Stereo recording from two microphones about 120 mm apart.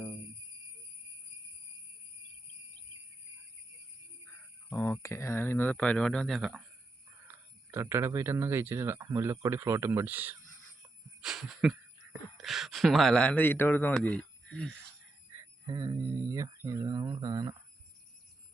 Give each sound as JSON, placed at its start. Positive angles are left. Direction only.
{"t": 4.7, "sound": "speech", "side_deg": 25}
{"t": 7.3, "sound": "speech", "side_deg": -20}
{"t": 11.2, "sound": "speech", "side_deg": -5}
{"t": 15.6, "sound": "speech", "side_deg": -30}